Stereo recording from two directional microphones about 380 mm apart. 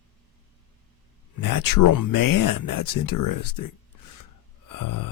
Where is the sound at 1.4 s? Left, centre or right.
Left.